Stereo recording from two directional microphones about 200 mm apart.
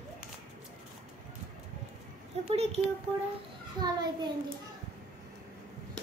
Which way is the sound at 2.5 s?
30° right (ahead or behind).